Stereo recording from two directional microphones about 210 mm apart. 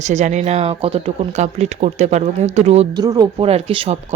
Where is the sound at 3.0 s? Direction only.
20° right (ahead or behind).